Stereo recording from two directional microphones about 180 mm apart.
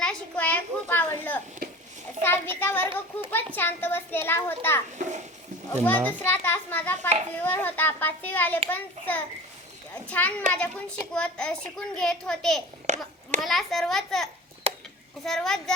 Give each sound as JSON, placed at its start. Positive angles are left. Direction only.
{"t": 0.0, "sound": "a child's voice", "side_deg": 5}
{"t": 4.9, "sound": "a child's voice", "side_deg": -40}
{"t": 5.7, "sound": "a child's voice", "side_deg": 10}
{"t": 12.9, "sound": "a sound", "side_deg": -40}
{"t": 13.4, "sound": "a child's voice", "side_deg": 0}
{"t": 14.7, "sound": "a sound", "side_deg": -35}
{"t": 15.2, "sound": "a child's voice", "side_deg": 0}